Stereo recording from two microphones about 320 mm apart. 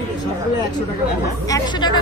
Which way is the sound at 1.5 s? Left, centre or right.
Centre.